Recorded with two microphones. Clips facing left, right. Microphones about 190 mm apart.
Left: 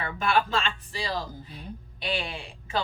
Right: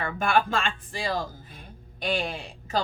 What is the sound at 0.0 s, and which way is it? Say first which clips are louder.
Speech: right 1 dB; 50° right (ahead or behind).